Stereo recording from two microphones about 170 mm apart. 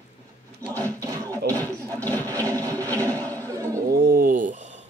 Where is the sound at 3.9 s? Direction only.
60° right (ahead or behind).